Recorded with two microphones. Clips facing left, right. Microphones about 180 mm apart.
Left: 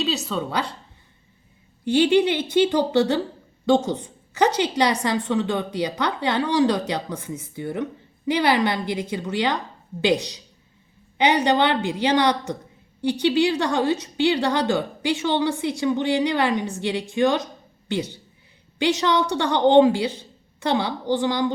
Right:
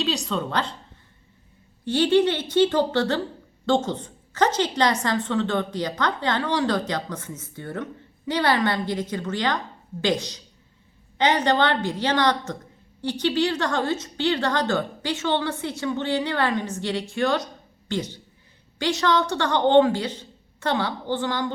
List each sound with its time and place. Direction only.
0.0 s speech: 5° left (ahead or behind)
1.8 s a woman's voice: 15° left (ahead or behind)